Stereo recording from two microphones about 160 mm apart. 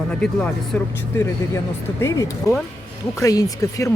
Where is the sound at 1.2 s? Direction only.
15° left (ahead or behind).